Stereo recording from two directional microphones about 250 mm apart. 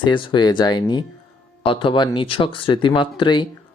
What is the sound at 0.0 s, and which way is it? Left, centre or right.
Speech, centre.